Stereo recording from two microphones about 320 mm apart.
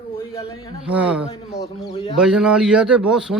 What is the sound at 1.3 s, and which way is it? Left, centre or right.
Speech, centre.